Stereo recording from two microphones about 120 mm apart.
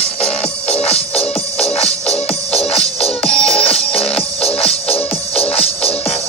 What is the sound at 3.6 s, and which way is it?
Music, 55° left (ahead or behind).